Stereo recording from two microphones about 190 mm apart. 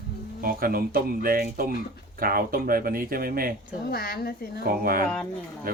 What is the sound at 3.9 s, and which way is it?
Speech, 55° left (ahead or behind).